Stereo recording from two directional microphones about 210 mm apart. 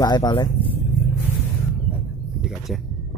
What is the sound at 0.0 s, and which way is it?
Speech, 20° left (ahead or behind).